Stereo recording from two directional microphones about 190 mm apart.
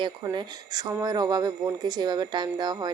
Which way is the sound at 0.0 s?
25° right (ahead or behind).